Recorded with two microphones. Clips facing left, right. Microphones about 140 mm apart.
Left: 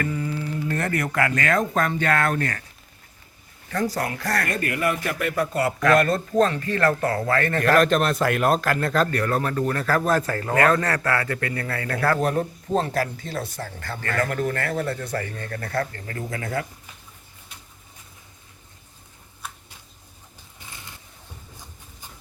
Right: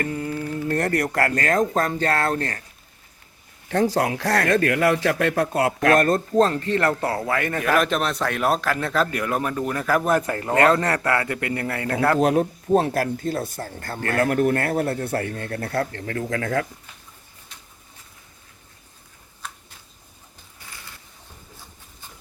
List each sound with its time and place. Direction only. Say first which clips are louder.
0.0 s speech: right 1 dB; 50° right (ahead or behind); by 2.6 s 30° right (ahead or behind)
3.7 s speech: right 5 dB; 80° right
5.9 s speech: even; 45° right (ahead or behind); by 12.2 s 20° right (ahead or behind)
12.2 s a man's voice: right 4 dB; 80° right
20.7 s a sound: even; 20° left (ahead or behind)